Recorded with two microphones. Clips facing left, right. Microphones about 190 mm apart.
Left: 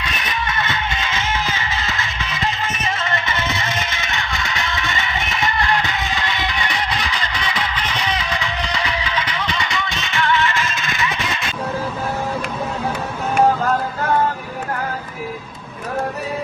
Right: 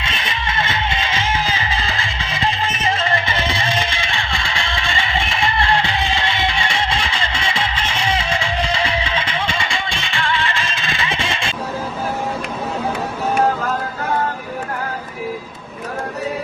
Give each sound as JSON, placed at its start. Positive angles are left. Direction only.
{"t": 0.0, "sound": "music", "side_deg": -25}